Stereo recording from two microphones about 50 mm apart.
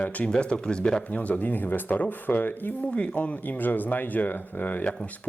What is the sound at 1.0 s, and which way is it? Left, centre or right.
Speech, left.